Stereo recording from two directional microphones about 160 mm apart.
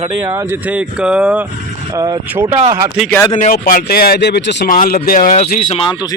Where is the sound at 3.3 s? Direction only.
60° left (ahead or behind).